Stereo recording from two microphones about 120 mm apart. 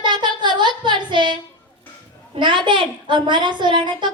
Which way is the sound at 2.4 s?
40° right (ahead or behind).